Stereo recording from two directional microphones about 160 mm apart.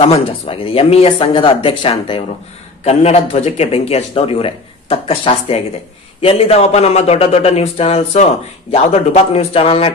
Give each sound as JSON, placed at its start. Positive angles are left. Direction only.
{"t": 0.0, "sound": "a man's voice", "side_deg": 35}